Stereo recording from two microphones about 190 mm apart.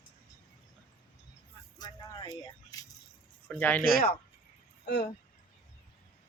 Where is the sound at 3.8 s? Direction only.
50° left (ahead or behind).